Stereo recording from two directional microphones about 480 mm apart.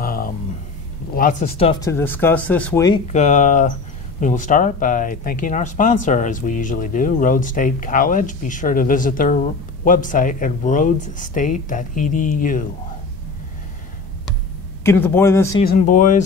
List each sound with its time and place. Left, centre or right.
0.0 s a sound: centre
1.1 s speech: centre
14.8 s speech: centre
15.6 s speech: centre